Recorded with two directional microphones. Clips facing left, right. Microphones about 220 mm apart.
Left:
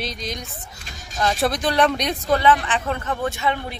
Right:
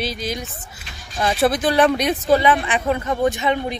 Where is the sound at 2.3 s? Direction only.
15° right (ahead or behind).